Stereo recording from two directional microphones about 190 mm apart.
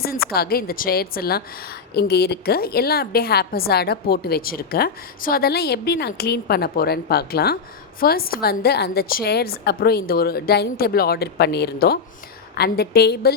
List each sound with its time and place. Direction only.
0.0 s a woman's voice: 50° left (ahead or behind)